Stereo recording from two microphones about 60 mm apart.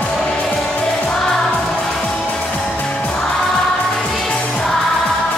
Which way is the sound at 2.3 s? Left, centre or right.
Centre.